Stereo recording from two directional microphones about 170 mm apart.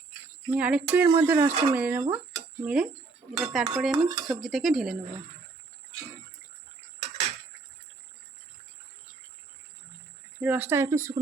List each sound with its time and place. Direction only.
0.5 s speech: 5° right (ahead or behind)
2.3 s a sound: 5° right (ahead or behind)
3.3 s cutlery: centre (ahead or behind)
3.9 s dishes: 20° right (ahead or behind)
4.4 s cutlery: centre (ahead or behind)
10.4 s speech: 10° right (ahead or behind)